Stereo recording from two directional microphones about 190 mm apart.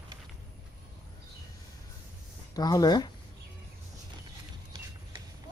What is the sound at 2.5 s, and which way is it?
Speech, 20° left (ahead or behind).